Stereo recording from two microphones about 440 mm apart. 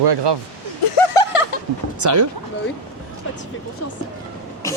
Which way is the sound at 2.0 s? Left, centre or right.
Right.